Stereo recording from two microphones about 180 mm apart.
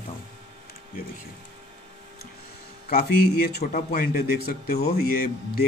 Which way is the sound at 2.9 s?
60° left (ahead or behind).